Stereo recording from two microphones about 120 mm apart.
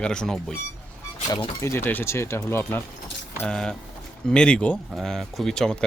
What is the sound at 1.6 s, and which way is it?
Speech, 20° left (ahead or behind).